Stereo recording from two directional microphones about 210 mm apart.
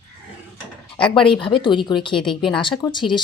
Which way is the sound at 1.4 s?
25° left (ahead or behind).